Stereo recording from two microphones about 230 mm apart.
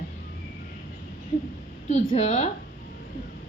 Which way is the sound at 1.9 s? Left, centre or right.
Left.